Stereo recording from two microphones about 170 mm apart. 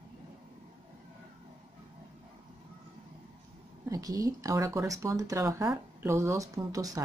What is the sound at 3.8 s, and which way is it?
Speech, 20° right (ahead or behind).